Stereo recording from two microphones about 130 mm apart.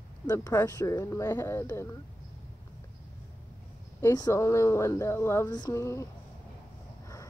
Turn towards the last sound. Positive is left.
turn(degrees=20)  # may be behind; listen again after turning